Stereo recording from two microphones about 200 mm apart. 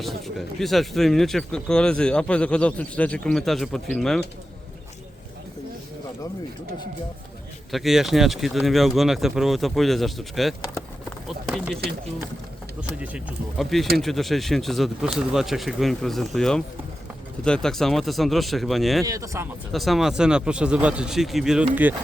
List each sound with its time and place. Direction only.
0.0 s speech: centre (ahead or behind)
7.7 s speech: centre (ahead or behind)
13.0 s speech: 5° right (ahead or behind)
19.0 s speech: 15° right (ahead or behind)
19.7 s speech: centre (ahead or behind)